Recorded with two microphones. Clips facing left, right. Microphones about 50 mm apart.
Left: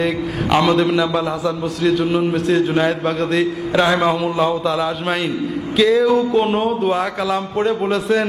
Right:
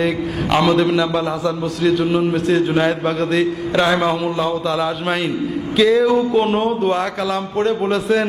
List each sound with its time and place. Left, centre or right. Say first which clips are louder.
0.5 s a man's voice: even; centre